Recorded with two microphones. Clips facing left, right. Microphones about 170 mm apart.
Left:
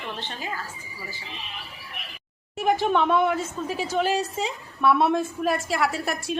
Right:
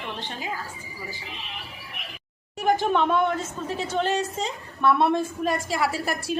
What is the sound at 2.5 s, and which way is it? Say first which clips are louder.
A woman's voice: even; centre (ahead or behind).